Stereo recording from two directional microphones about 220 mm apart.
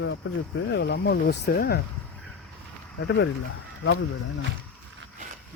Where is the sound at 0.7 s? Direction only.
50° left (ahead or behind).